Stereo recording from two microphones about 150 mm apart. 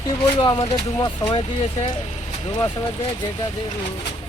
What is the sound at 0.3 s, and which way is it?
Speech, 30° left (ahead or behind).